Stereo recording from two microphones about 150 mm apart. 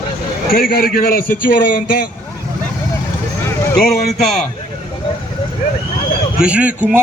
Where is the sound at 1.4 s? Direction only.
65° left (ahead or behind).